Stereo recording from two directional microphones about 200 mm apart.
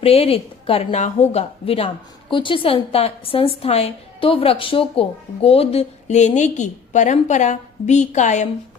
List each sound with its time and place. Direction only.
0.0 s a woman's voice: 30° left (ahead or behind)